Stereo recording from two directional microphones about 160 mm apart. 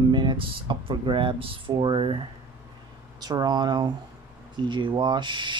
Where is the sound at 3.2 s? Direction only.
25° right (ahead or behind).